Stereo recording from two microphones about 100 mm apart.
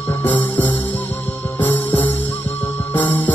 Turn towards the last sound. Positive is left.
turn(degrees=15)  # may be behind; listen again after turning